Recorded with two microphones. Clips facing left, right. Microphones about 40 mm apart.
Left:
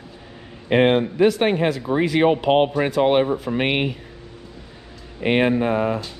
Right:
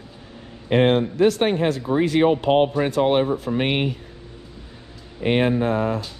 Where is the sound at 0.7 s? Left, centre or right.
Left.